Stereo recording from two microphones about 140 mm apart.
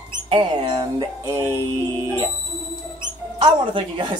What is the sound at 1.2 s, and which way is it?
Music, 20° right (ahead or behind).